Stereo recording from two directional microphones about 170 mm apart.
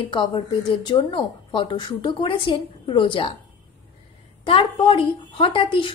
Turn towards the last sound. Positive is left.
turn(degrees=30)  # may be behind; listen again after turning